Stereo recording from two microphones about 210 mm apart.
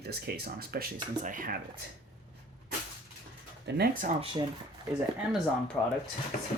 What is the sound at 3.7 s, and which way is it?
Speech, 45° right (ahead or behind).